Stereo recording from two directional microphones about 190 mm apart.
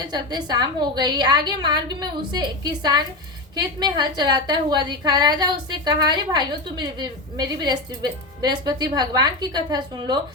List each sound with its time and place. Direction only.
0.0 s a woman's voice: 20° right (ahead or behind)